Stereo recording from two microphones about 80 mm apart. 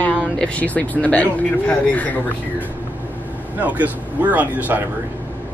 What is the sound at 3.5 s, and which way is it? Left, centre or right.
Speech, centre.